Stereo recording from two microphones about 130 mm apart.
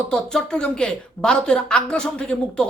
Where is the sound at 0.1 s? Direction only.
5° left (ahead or behind).